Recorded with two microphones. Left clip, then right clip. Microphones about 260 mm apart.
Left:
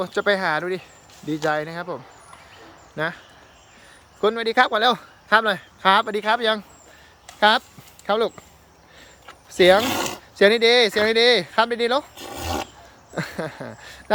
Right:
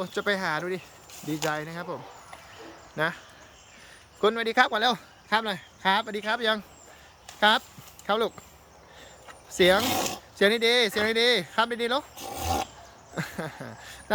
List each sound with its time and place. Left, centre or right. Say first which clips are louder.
0.0 s speech: left 7 dB; centre
1.1 s speech: left 5 dB; right
1.5 s speech: left 8 dB; centre
4.2 s speech: left 4 dB; centre
9.6 s speech: left 6 dB; centre